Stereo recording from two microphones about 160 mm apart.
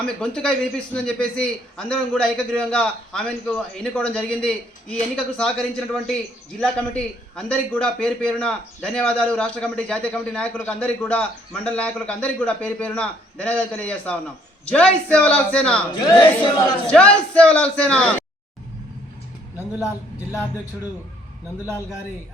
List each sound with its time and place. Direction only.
0.0 s a man's voice: 5° left (ahead or behind)
16.0 s a man's voice: 25° left (ahead or behind)
16.8 s a man's voice: 5° left (ahead or behind)
19.8 s a man's voice: 5° right (ahead or behind)